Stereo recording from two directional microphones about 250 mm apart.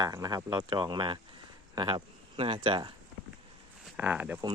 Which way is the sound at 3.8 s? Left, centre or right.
Centre.